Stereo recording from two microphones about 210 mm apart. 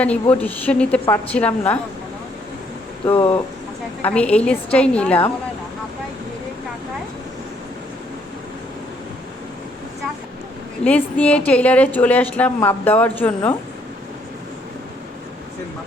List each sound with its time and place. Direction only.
0.0 s a woman's voice: 5° left (ahead or behind)
3.1 s speech: 25° left (ahead or behind)
4.0 s a woman's voice: 5° left (ahead or behind)
10.8 s a woman's voice: 5° left (ahead or behind)